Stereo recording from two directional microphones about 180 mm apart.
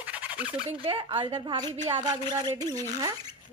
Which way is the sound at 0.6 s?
30° right (ahead or behind).